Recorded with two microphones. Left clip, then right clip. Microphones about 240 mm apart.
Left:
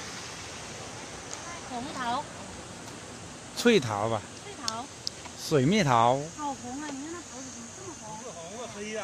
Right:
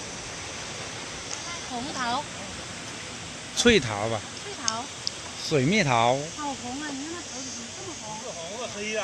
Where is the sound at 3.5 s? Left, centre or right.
Centre.